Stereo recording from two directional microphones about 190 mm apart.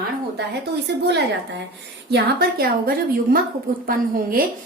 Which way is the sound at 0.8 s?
65° right (ahead or behind).